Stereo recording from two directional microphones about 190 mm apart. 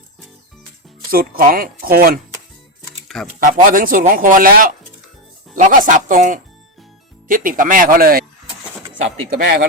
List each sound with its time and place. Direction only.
1.1 s speech: 50° right (ahead or behind)
3.4 s speech: 45° right (ahead or behind)